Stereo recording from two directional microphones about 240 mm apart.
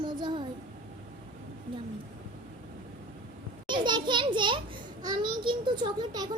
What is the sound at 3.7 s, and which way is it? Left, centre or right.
A child's voice, centre.